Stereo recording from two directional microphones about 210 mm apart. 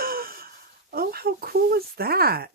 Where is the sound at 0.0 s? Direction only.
45° right (ahead or behind).